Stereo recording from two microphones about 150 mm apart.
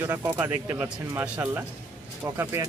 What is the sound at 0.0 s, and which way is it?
Speech, 15° right (ahead or behind).